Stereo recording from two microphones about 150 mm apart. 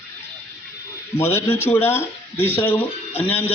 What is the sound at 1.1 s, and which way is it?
A man's voice, 15° left (ahead or behind).